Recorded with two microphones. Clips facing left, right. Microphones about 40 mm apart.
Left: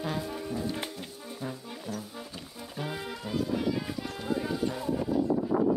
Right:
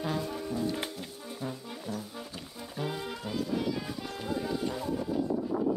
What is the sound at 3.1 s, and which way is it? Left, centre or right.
Music, centre.